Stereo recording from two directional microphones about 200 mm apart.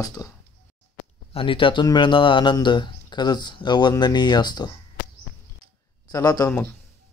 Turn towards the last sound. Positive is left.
turn(degrees=20)  # may be behind; listen again after turning